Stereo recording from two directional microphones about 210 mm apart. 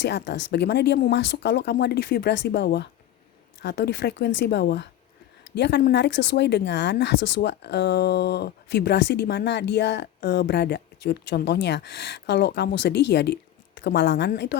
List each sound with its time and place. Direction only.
0.0 s speech: 55° left (ahead or behind)